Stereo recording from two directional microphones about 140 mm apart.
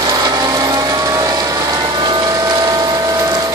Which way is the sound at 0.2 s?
25° right (ahead or behind).